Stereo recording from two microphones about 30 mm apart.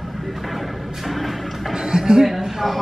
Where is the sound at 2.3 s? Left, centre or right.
Centre.